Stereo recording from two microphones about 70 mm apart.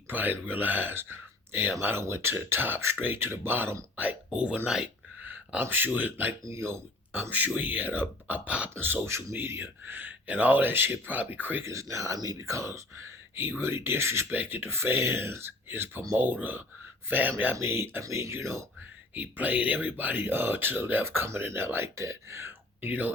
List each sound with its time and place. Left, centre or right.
0.1 s speech: right; by 4.9 s centre
5.2 s a sound: right
5.6 s a man's voice: right
6.4 s speech: right
7.1 s a man's voice: right
8.8 s a man's voice: right
11.6 s speech: right
13.3 s speech: right
14.3 s a man's voice: right
17.6 s speech: right
19.1 s speech: right
22.9 s a man's voice: right